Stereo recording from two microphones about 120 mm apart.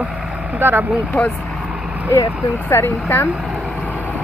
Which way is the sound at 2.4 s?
20° left (ahead or behind).